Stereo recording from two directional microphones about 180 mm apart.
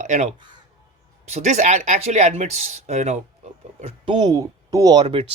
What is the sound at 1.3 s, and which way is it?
Speech, 40° right (ahead or behind).